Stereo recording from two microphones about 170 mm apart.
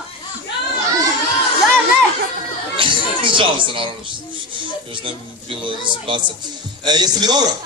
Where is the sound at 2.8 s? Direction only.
30° right (ahead or behind).